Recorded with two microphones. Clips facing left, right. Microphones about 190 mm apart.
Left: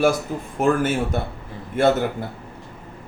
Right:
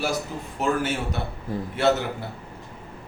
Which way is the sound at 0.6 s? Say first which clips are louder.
Left 5 dB; 50° left (ahead or behind).